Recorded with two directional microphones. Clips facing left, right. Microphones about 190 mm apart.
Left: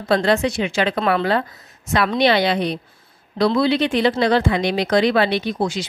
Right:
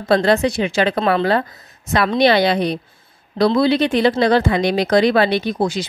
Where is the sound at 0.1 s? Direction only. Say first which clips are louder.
Right 3 dB; 40° right (ahead or behind).